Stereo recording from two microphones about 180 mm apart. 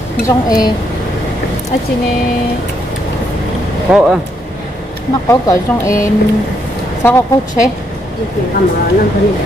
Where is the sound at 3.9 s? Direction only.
5° right (ahead or behind).